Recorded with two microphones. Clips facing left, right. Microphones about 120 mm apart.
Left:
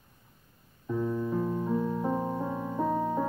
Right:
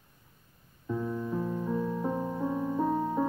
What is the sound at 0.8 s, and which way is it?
Piano, 10° left (ahead or behind).